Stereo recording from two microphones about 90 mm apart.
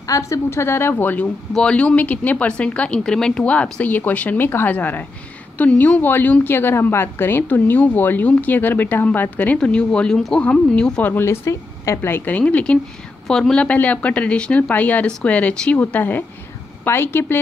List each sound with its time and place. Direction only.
0.0 s a woman's voice: 35° left (ahead or behind)